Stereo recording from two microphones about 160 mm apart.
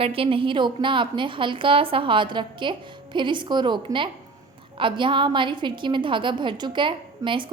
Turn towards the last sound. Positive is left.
turn(degrees=-30)  # may be behind; listen again after turning